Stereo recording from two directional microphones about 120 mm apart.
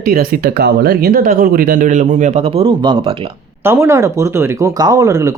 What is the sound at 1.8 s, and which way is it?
Speech, 90° right.